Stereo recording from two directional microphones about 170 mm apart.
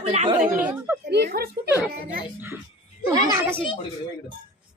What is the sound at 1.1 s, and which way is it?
Speech, 70° right (ahead or behind).